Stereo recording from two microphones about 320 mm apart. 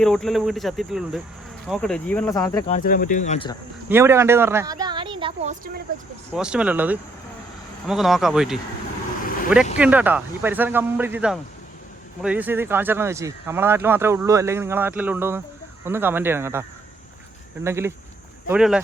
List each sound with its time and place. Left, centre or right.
0.0 s speech: centre
2.7 s speech: left
3.8 s a woman's voice: centre; by 5.8 s right
6.3 s speech: centre
9.7 s speech: centre